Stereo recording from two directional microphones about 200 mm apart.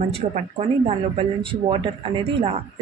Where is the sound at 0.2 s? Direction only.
35° right (ahead or behind).